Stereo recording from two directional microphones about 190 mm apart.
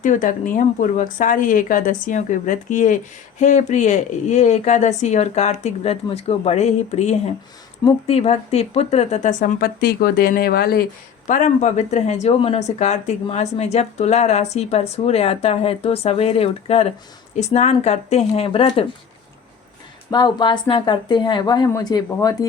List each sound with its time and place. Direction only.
0.0 s a woman's voice: 45° left (ahead or behind)
11.3 s a woman's voice: 40° left (ahead or behind)
20.1 s speech: 25° left (ahead or behind)